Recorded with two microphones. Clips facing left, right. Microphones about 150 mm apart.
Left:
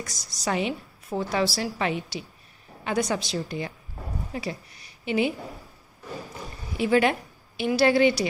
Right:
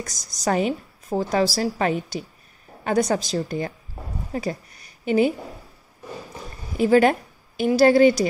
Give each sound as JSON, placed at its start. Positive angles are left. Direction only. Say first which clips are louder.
{"t": 0.0, "sound": "a woman's voice", "louder": "right 5 dB", "side_deg": -45}
{"t": 6.8, "sound": "a woman's voice", "louder": "right 5 dB", "side_deg": -40}